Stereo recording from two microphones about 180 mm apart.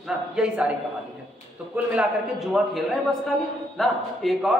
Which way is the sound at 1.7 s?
5° right (ahead or behind).